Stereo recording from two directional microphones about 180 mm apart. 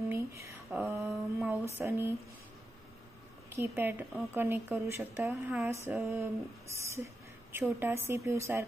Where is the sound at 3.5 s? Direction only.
15° right (ahead or behind).